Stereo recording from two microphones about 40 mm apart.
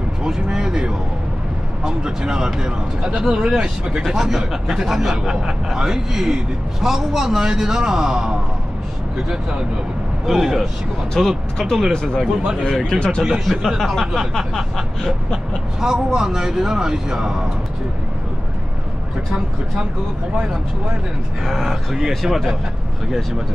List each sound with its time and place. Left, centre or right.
0.2 s a man's voice: centre
4.1 s a man's voice: centre
10.2 s a man's voice: centre
11.5 s speech: centre
12.6 s speech: centre
15.8 s a man's voice: centre
21.5 s speech: centre